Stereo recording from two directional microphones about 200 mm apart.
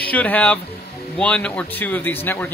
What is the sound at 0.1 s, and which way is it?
Speech, 10° left (ahead or behind).